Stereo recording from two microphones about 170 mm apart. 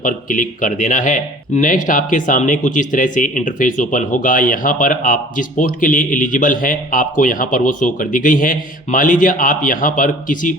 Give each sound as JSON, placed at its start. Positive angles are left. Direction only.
{"t": 0.0, "sound": "speech", "side_deg": 50}